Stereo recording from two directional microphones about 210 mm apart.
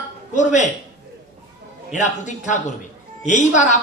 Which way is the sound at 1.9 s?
35° left (ahead or behind).